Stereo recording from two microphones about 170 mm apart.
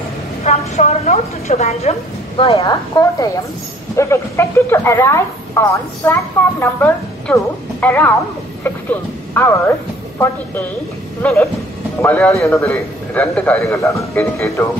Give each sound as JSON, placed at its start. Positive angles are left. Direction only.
{"t": 0.4, "sound": "a woman's voice", "side_deg": 40}
{"t": 2.6, "sound": "a woman's voice", "side_deg": 20}
{"t": 9.3, "sound": "a woman's voice", "side_deg": 15}
{"t": 12.6, "sound": "a woman's voice", "side_deg": 5}